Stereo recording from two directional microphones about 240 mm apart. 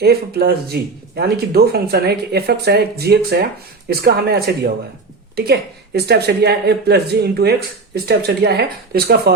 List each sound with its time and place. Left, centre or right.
0.0 s speech: right